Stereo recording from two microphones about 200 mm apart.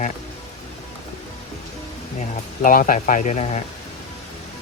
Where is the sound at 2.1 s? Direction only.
40° left (ahead or behind).